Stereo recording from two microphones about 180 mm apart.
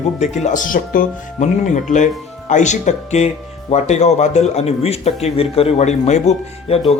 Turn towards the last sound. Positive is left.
turn(degrees=35)  # may be behind; listen again after turning